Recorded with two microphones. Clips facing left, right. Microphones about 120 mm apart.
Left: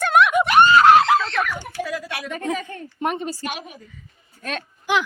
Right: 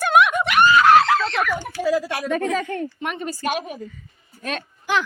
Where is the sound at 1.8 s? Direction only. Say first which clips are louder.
Right 8 dB; 30° right (ahead or behind).